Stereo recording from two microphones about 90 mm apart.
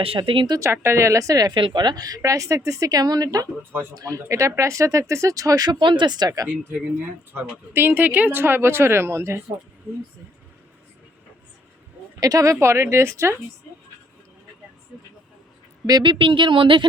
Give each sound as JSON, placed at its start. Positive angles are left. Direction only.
{"t": 0.0, "sound": "speech", "side_deg": -85}
{"t": 0.5, "sound": "speech", "side_deg": -30}
{"t": 1.5, "sound": "speech", "side_deg": -60}
{"t": 5.8, "sound": "speech", "side_deg": -60}
{"t": 7.3, "sound": "speech", "side_deg": -25}
{"t": 12.2, "sound": "speech", "side_deg": -40}
{"t": 16.0, "sound": "speech", "side_deg": -75}